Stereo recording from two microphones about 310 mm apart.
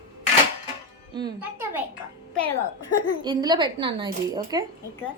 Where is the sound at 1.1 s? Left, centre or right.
Centre.